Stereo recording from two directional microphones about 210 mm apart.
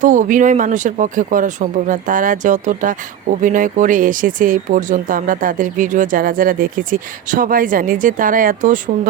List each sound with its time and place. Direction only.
0.0 s speech: 40° right (ahead or behind)